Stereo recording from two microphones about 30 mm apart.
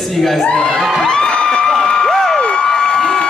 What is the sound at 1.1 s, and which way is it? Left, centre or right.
Music, left.